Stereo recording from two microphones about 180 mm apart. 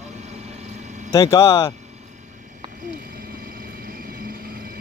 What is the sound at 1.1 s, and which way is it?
Speech, 20° left (ahead or behind).